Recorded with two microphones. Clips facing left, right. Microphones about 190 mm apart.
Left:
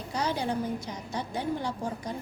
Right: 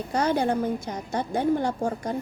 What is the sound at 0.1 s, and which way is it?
A woman's voice, 50° right (ahead or behind).